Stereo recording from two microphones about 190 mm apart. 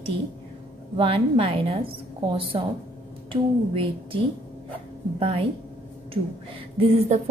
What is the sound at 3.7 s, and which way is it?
Speech, 25° right (ahead or behind).